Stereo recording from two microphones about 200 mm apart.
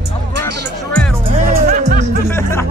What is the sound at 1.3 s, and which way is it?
Music, 40° right (ahead or behind).